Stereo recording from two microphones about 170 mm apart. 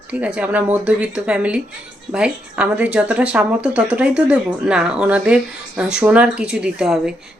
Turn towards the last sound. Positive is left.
turn(degrees=-5)  # may be behind; listen again after turning